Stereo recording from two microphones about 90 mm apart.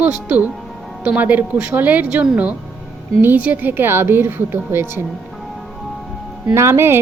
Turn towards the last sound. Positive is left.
turn(degrees=-25)  # may be behind; listen again after turning